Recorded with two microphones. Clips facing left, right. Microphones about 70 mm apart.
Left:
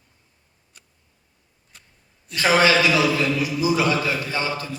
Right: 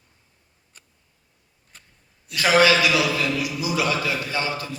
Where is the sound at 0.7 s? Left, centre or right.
Right.